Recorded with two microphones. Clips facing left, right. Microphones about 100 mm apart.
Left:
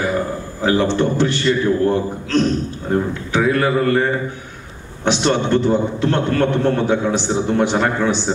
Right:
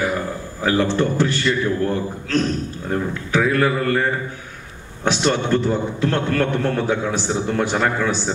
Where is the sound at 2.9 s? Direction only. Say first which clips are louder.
Left 2 dB; 25° left (ahead or behind).